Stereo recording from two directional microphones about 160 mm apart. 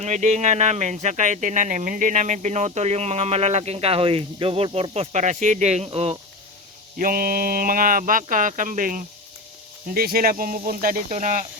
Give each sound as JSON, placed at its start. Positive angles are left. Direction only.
{"t": 0.0, "sound": "speech", "side_deg": -45}
{"t": 7.0, "sound": "speech", "side_deg": -65}